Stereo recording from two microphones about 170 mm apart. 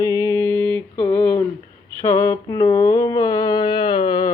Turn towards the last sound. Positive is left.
turn(degrees=25)  # may be behind; listen again after turning